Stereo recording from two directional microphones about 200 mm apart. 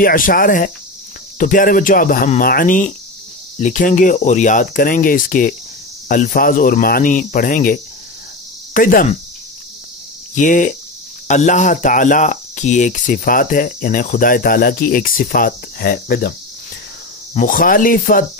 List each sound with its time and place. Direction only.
0.0 s speech: 45° left (ahead or behind)
10.3 s speech: 40° left (ahead or behind)